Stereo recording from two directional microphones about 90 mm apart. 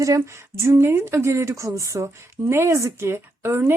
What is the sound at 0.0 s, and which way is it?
A woman's voice, 35° right (ahead or behind).